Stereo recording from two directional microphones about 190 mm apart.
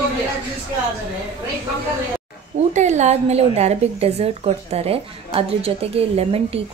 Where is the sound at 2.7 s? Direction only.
40° right (ahead or behind).